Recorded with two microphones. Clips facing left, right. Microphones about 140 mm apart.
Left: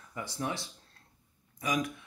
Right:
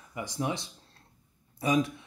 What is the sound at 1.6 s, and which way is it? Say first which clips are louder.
Speech: right 6 dB; 30° right (ahead or behind).